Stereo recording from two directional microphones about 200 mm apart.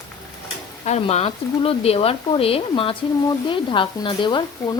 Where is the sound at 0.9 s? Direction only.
30° left (ahead or behind).